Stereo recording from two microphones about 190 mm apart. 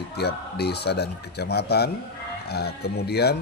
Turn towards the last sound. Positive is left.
turn(degrees=60)  # may be behind; listen again after turning